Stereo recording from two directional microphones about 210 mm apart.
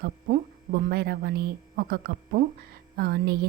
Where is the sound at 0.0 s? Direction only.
45° right (ahead or behind).